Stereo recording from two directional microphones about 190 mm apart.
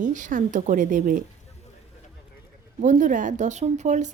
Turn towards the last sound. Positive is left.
turn(degrees=-40)  # may be behind; listen again after turning